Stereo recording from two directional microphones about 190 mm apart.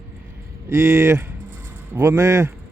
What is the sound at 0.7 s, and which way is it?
Speech, 15° right (ahead or behind).